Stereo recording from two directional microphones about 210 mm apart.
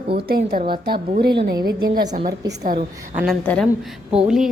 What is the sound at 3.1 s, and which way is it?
A woman's voice, centre (ahead or behind).